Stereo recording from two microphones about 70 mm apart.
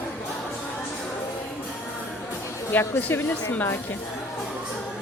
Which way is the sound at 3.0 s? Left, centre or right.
Left.